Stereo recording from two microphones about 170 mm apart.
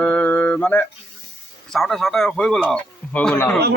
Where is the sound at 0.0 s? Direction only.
10° left (ahead or behind).